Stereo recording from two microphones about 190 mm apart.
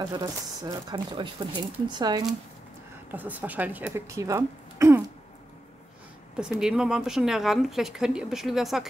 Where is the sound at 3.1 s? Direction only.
10° right (ahead or behind).